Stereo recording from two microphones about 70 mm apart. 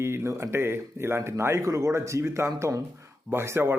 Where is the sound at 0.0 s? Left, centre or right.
Right.